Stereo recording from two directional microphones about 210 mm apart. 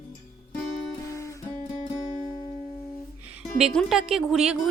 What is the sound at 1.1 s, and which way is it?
Guitar, 15° left (ahead or behind).